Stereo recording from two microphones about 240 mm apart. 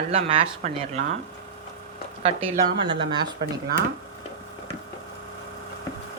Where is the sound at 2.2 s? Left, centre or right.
Right.